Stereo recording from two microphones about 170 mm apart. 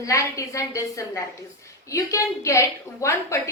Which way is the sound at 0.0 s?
20° left (ahead or behind).